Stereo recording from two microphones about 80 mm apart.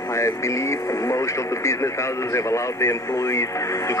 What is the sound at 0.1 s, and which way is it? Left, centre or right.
Speech, left.